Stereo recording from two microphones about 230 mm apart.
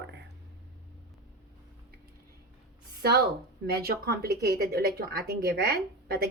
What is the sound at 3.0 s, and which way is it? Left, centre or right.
A woman's voice, right.